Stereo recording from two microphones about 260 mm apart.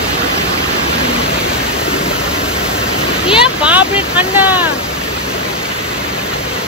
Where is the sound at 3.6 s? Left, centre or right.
Centre.